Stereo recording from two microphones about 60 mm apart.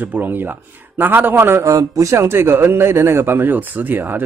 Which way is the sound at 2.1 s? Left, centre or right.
Right.